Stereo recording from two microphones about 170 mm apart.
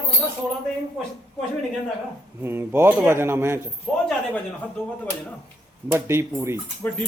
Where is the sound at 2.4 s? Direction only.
15° right (ahead or behind).